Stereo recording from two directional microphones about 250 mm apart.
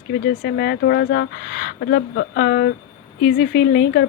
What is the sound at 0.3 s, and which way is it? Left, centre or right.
Speech, left.